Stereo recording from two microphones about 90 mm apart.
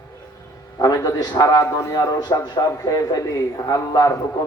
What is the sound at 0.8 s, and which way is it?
A man's voice, 40° left (ahead or behind).